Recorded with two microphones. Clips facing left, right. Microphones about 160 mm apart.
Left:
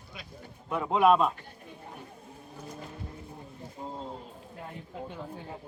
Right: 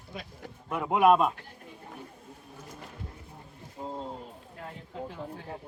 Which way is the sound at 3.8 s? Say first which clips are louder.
Right 2 dB; 5° right (ahead or behind).